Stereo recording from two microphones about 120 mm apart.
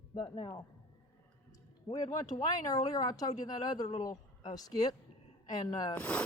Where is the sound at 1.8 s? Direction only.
30° left (ahead or behind).